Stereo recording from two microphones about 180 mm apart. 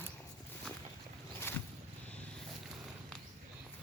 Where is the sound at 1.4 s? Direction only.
15° left (ahead or behind).